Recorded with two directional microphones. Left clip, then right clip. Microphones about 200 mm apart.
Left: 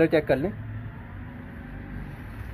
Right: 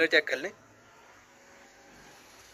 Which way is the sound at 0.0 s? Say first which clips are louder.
Left 3 dB; centre (ahead or behind).